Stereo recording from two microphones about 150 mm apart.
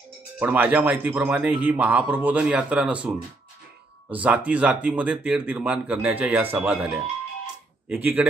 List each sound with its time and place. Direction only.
0.4 s speech: 10° right (ahead or behind)
4.1 s speech: 10° right (ahead or behind)